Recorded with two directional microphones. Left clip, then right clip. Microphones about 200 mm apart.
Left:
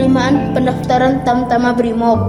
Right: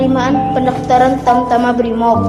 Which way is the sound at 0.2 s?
45° left (ahead or behind).